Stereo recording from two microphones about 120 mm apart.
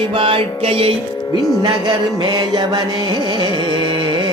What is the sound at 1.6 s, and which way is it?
Music, 40° right (ahead or behind).